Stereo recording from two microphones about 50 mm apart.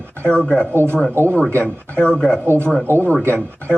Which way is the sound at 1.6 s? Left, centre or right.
Left.